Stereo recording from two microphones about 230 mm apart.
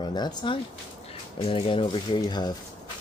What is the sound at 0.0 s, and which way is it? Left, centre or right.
Speech, centre.